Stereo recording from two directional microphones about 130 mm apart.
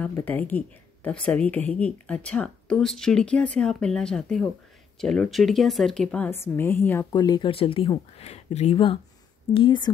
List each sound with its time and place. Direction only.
0.1 s speech: 15° left (ahead or behind)
6.4 s a woman's voice: 20° left (ahead or behind)
7.2 s speech: 35° left (ahead or behind)
8.2 s speech: 55° left (ahead or behind)
8.7 s speech: 40° left (ahead or behind)